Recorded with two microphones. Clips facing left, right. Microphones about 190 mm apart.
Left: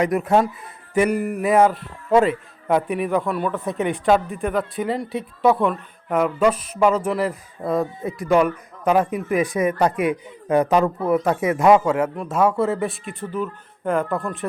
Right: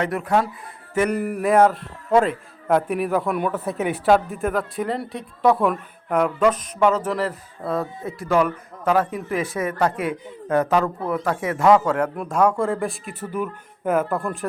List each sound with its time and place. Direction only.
0.0 s speech: 20° left (ahead or behind)
0.9 s speech: 10° left (ahead or behind); by 14.3 s 10° right (ahead or behind)